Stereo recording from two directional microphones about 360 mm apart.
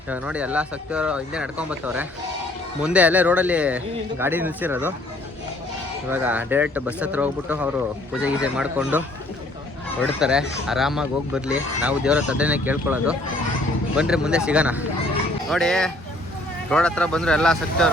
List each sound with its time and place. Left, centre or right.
0.1 s speech: centre
6.1 s speech: centre